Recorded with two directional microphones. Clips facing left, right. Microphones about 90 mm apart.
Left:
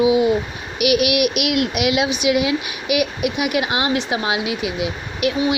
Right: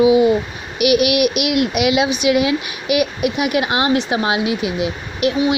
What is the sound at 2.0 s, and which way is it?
Speech, 50° right (ahead or behind).